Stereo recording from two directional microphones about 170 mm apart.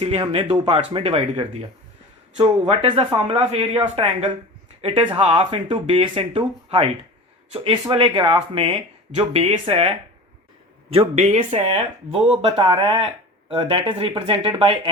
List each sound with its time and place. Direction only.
0.0 s speech: 35° right (ahead or behind)